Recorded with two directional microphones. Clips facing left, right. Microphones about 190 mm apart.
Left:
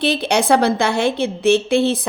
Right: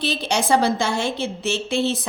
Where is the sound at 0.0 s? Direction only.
60° left (ahead or behind).